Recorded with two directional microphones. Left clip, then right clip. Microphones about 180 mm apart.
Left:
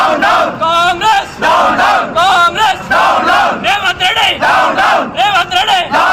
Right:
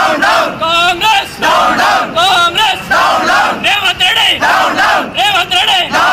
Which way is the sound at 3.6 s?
10° right (ahead or behind).